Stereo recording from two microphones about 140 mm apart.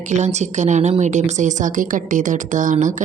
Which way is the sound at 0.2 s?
55° right (ahead or behind).